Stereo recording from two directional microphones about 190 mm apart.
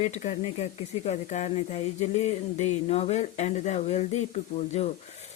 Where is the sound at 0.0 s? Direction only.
35° left (ahead or behind).